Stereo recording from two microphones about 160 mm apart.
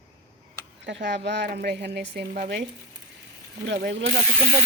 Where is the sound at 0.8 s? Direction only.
90° right.